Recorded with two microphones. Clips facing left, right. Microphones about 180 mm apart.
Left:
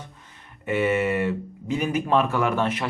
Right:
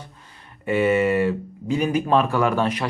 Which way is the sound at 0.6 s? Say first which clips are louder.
Right 3 dB; 35° right (ahead or behind).